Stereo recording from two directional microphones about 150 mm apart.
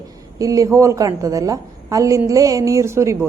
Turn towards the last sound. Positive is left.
turn(degrees=-20)  # may be behind; listen again after turning